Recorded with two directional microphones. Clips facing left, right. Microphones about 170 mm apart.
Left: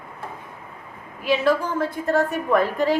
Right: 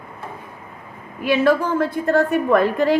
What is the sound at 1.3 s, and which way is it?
A woman's voice, 60° right (ahead or behind).